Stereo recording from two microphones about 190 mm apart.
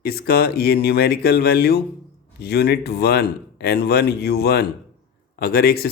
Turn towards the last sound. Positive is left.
turn(degrees=55)  # may be behind; listen again after turning